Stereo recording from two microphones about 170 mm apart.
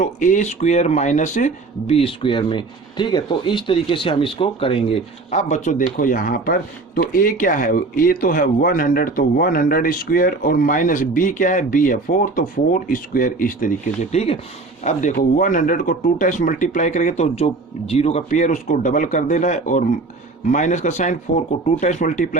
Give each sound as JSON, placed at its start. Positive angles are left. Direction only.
{"t": 0.0, "sound": "speech", "side_deg": 50}